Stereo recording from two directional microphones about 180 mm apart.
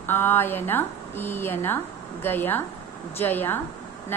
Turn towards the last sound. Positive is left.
turn(degrees=10)  # may be behind; listen again after turning